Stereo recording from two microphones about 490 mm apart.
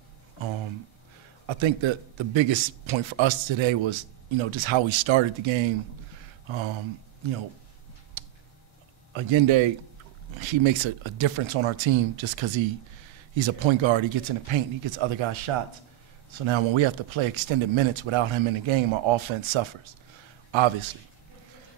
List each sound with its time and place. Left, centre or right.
1.5 s a man's voice: right
8.2 s a sound: right
9.1 s a man's voice: right